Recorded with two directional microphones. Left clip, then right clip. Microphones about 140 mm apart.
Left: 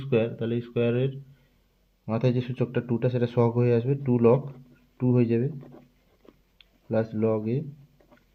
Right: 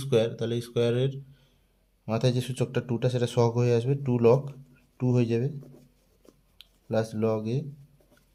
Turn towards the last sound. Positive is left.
turn(degrees=-10)  # may be behind; listen again after turning